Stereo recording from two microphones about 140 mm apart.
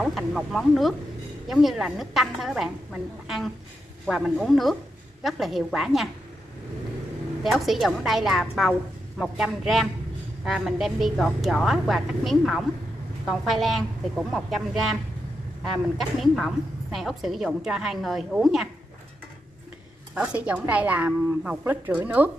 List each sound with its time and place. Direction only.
0.0 s a woman's voice: 5° right (ahead or behind)
7.4 s a woman's voice: centre (ahead or behind)
20.2 s speech: 10° right (ahead or behind)